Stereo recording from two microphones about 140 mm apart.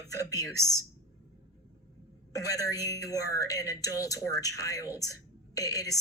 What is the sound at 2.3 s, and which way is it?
A woman's voice, 25° left (ahead or behind).